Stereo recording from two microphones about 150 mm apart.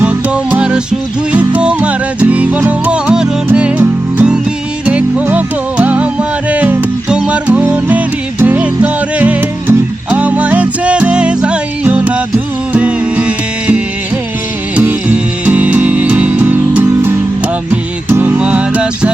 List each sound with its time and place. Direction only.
0.0 s music: 10° right (ahead or behind)